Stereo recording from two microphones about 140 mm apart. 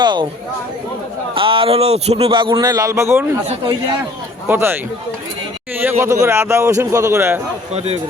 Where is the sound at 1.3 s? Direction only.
40° right (ahead or behind); by 3.3 s 20° right (ahead or behind).